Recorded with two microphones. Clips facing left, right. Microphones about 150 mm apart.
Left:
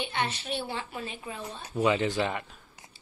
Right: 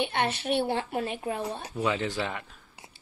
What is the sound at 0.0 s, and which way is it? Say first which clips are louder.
A woman's voice: right 4 dB; 60° right (ahead or behind).